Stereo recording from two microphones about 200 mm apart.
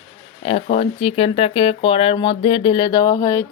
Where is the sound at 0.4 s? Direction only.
30° left (ahead or behind).